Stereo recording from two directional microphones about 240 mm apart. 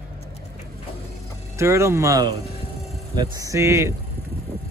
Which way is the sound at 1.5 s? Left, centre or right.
Centre.